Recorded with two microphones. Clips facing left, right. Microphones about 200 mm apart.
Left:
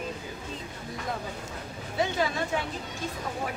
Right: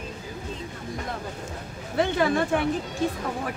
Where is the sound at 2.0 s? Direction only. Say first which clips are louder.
Right 5 dB; 55° right (ahead or behind).